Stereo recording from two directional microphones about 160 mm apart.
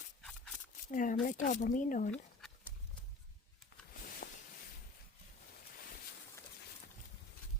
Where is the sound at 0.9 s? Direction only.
55° left (ahead or behind).